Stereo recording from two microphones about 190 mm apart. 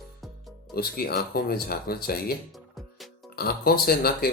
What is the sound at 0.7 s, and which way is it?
Speech, 55° left (ahead or behind).